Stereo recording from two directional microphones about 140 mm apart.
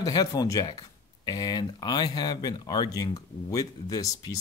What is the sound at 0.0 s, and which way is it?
Speech, 25° left (ahead or behind).